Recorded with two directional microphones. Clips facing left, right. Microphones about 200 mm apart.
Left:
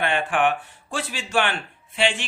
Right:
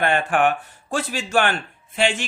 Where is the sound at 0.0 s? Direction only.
45° right (ahead or behind).